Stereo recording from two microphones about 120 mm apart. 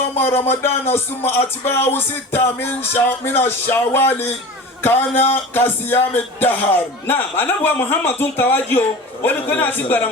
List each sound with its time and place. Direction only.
0.3 s music: 20° left (ahead or behind)
4.8 s speech: 20° left (ahead or behind)